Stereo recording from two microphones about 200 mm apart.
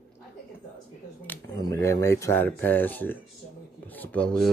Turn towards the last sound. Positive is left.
turn(degrees=5)  # may be behind; listen again after turning